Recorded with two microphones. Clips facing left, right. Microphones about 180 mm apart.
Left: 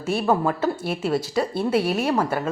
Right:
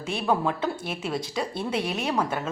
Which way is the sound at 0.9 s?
55° left (ahead or behind).